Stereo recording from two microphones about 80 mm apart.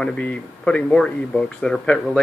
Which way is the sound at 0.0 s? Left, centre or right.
Centre.